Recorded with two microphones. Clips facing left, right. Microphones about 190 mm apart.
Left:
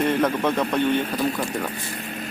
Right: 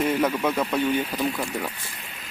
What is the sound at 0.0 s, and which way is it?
A man's voice, 5° right (ahead or behind).